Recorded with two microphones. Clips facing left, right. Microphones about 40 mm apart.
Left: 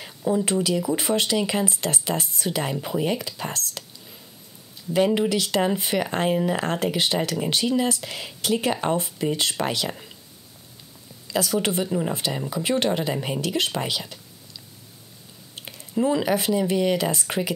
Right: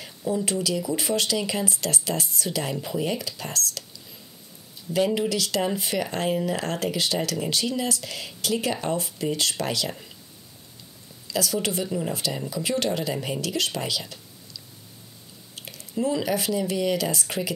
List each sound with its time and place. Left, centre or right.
0.0 s a sound: left
0.5 s speech: left
2.7 s speech: centre
4.9 s speech: left
11.2 s a woman's voice: left
11.8 s speech: centre
12.4 s speech: left
15.6 s squish: left
16.0 s speech: left